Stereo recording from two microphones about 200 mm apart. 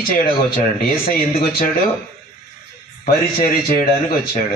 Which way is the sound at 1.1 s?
50° left (ahead or behind).